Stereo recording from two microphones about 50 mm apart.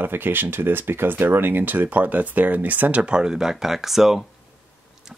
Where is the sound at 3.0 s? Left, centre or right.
Centre.